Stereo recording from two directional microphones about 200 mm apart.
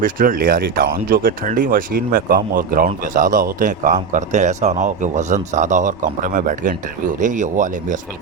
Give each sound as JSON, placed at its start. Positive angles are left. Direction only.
{"t": 0.0, "sound": "speech", "side_deg": -45}